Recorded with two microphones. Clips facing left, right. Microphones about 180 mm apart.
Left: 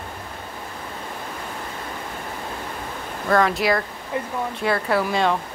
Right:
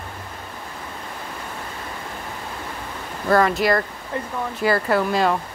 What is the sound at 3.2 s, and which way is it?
Speech, centre (ahead or behind).